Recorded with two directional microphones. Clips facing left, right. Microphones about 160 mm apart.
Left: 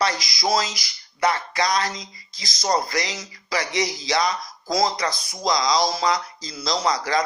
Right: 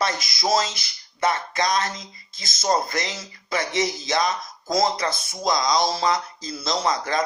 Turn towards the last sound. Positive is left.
turn(degrees=-25)  # may be behind; listen again after turning